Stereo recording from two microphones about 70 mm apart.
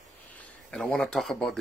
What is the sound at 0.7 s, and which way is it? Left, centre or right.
Speech, centre.